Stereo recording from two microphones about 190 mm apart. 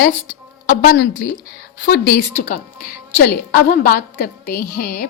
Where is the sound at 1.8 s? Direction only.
55° left (ahead or behind).